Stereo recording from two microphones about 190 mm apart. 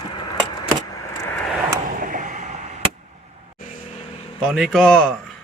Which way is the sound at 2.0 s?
45° right (ahead or behind).